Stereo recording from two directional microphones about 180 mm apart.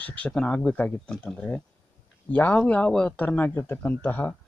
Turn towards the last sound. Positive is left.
turn(degrees=10)  # may be behind; listen again after turning